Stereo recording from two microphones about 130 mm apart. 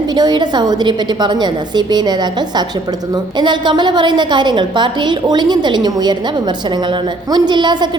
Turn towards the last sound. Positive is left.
turn(degrees=-35)  # may be behind; listen again after turning